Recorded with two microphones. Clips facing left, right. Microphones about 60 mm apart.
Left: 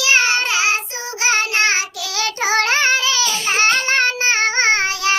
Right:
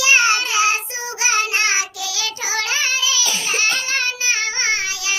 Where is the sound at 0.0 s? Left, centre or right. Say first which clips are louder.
Right 1 dB; right.